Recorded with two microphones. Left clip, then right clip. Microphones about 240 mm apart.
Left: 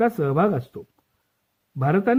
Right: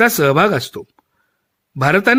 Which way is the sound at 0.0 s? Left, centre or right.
Right.